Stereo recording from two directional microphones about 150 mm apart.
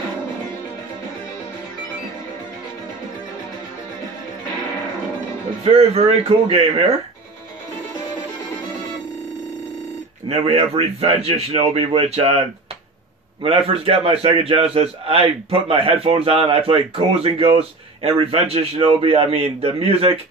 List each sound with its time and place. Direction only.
5.6 s a man's voice: 45° right (ahead or behind)
10.2 s a man's voice: 40° right (ahead or behind)
13.4 s a man's voice: 40° right (ahead or behind)